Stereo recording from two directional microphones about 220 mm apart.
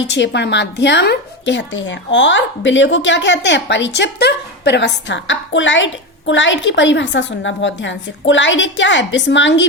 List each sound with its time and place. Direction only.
0.0 s a woman's voice: 55° left (ahead or behind)